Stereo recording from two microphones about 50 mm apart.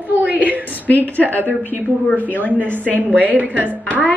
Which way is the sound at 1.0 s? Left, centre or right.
Left.